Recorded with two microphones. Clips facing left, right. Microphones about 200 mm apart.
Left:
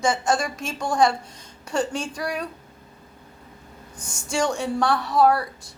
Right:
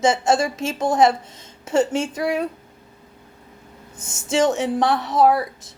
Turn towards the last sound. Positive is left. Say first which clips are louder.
# right 2 dB
turn(degrees=-20)  # may be behind; listen again after turning